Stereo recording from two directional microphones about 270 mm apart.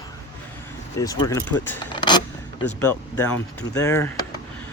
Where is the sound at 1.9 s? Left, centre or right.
Centre.